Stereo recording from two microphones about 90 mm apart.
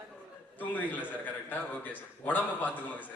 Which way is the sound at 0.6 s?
20° left (ahead or behind).